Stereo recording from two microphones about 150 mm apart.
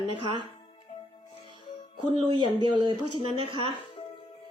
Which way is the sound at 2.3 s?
30° right (ahead or behind).